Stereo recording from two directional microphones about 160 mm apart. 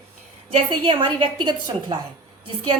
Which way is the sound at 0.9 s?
35° right (ahead or behind).